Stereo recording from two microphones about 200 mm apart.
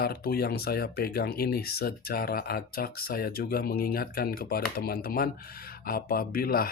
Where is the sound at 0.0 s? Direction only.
50° left (ahead or behind).